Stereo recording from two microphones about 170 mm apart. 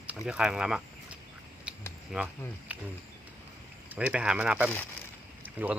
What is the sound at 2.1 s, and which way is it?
Speech, 5° right (ahead or behind).